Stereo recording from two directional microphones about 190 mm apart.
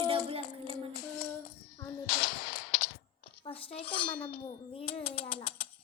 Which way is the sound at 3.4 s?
30° left (ahead or behind).